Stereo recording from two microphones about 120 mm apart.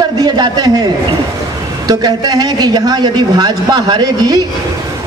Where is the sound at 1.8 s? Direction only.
35° right (ahead or behind).